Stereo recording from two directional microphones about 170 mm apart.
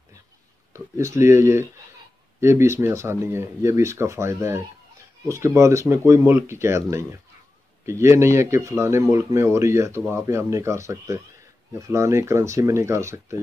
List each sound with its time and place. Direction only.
0.7 s speech: 15° right (ahead or behind)